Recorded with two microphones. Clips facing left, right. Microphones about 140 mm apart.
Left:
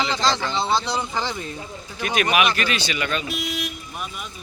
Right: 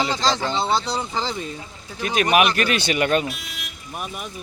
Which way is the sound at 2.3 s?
50° right (ahead or behind).